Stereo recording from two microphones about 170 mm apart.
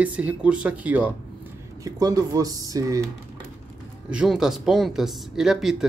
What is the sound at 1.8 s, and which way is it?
Speech, 20° right (ahead or behind).